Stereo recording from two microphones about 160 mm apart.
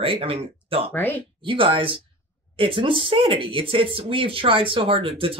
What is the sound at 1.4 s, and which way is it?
Speech, 30° right (ahead or behind).